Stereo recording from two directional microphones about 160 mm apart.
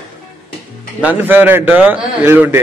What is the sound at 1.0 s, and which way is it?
A man's voice, 10° right (ahead or behind).